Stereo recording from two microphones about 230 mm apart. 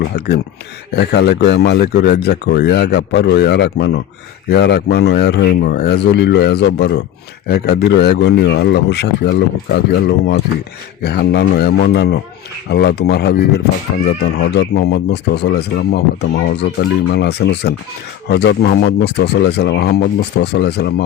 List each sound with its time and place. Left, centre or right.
0.9 s speech: left
17.1 s speech: left